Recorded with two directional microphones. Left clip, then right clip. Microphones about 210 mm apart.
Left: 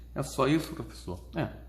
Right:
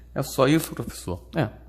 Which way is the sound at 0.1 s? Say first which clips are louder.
Right 7 dB; 40° right (ahead or behind).